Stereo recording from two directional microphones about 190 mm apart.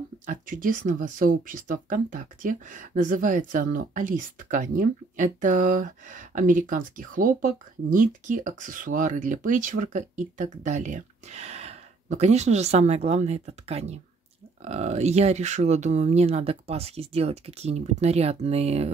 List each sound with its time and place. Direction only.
0.3 s speech: 45° right (ahead or behind)